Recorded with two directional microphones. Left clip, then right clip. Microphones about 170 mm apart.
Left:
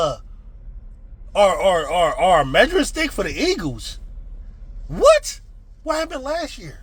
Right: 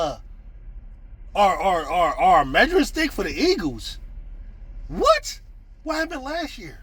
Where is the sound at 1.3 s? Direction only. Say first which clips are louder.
Left 3 dB; 30° left (ahead or behind).